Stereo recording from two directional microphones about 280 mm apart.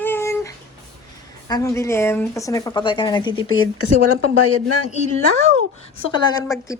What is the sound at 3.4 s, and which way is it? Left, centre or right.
Speech, left.